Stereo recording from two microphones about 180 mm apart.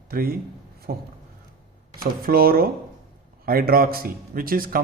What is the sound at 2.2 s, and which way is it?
A man's voice, 55° right (ahead or behind).